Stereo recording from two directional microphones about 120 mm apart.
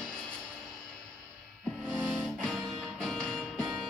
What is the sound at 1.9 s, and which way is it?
Music, 15° right (ahead or behind).